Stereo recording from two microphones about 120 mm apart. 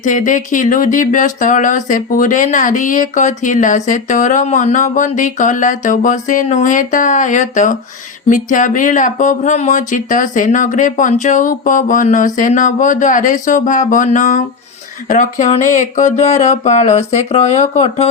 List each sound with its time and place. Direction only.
0.0 s speech: 90° left; by 18.1 s 65° left (ahead or behind)